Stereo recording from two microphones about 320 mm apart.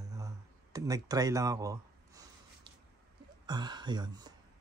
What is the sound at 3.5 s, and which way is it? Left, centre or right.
Speech, centre.